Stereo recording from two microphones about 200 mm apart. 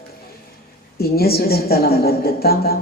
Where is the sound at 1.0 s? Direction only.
50° left (ahead or behind).